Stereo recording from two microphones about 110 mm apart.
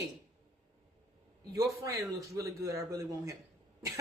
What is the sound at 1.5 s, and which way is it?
Speech, 30° right (ahead or behind).